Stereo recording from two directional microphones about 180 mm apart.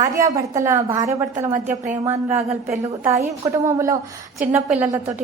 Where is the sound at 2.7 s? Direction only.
15° right (ahead or behind).